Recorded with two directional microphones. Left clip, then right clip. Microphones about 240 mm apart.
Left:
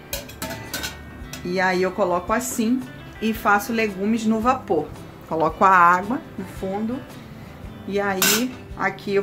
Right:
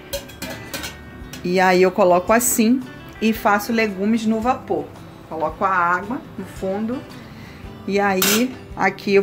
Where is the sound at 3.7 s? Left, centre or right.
Centre.